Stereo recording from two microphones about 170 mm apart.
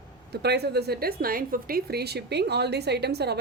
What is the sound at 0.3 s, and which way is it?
A woman's voice, 75° right (ahead or behind).